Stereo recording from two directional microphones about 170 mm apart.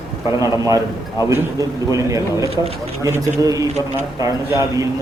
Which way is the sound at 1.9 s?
20° right (ahead or behind).